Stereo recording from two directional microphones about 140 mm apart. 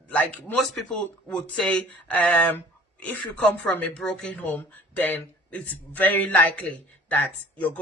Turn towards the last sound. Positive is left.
turn(degrees=10)  # may be behind; listen again after turning